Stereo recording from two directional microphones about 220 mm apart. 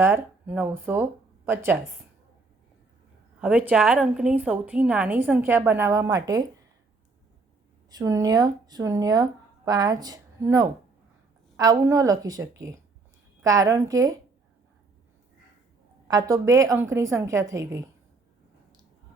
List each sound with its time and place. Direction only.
0.0 s a woman's voice: 10° right (ahead or behind)
3.4 s a woman's voice: 5° right (ahead or behind)
7.9 s a woman's voice: 15° right (ahead or behind)
16.0 s a woman's voice: 15° right (ahead or behind)